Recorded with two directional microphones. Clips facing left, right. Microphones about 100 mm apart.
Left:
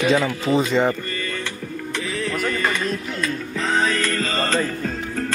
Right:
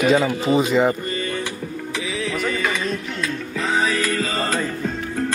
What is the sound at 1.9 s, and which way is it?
Music, centre (ahead or behind).